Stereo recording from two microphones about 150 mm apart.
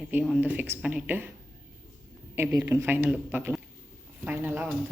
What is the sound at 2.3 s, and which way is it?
Speech, 15° right (ahead or behind).